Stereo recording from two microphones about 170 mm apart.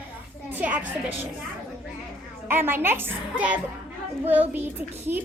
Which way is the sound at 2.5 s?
15° right (ahead or behind).